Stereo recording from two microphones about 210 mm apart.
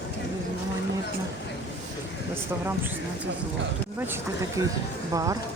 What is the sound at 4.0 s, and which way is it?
Speech, 10° right (ahead or behind).